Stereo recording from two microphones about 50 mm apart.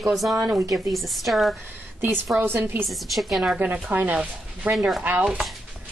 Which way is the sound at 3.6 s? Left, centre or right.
Right.